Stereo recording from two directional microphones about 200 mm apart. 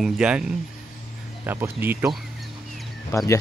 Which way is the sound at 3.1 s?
15° left (ahead or behind).